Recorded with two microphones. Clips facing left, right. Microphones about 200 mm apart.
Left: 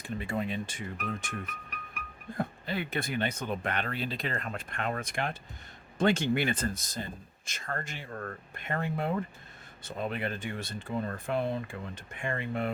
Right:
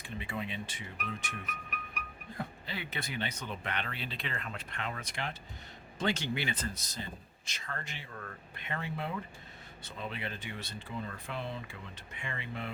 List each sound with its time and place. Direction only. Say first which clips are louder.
0.0 s speech: left 6 dB; 45° left (ahead or behind)
2.4 s speech: left 7 dB; 50° left (ahead or behind)